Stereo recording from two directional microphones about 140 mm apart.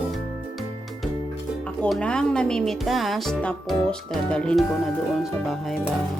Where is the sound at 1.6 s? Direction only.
5° left (ahead or behind).